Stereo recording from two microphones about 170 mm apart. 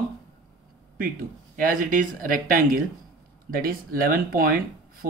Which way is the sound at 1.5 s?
50° right (ahead or behind).